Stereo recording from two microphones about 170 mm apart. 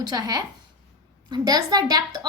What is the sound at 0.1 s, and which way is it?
A woman's voice, 20° right (ahead or behind).